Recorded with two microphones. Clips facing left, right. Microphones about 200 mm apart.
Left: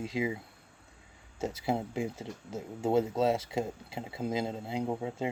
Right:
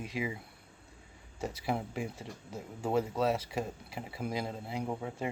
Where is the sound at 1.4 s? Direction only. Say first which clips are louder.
Left 3 dB; 25° left (ahead or behind).